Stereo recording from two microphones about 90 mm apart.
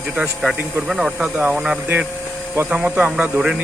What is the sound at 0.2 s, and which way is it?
Speech, 5° right (ahead or behind).